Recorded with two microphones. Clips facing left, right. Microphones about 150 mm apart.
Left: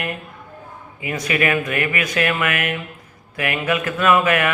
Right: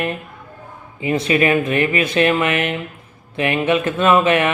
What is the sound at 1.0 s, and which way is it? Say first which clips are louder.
Speech: right 5 dB; 30° right (ahead or behind).